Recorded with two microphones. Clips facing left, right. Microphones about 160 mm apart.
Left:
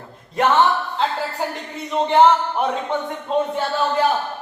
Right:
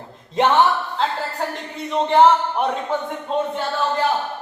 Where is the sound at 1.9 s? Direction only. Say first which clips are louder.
Even; centre (ahead or behind).